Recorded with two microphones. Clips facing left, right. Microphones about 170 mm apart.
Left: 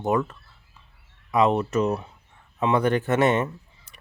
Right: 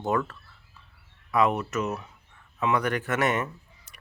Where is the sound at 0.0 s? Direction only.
20° left (ahead or behind).